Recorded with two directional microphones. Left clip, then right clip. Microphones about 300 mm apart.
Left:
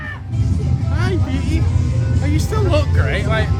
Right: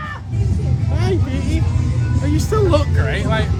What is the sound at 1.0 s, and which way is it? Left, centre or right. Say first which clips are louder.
Vehicle: right 2 dB; centre.